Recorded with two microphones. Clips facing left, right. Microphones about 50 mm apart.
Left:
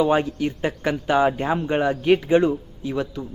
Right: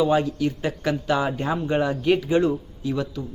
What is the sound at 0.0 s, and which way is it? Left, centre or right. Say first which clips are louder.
Speech: left 1 dB; left.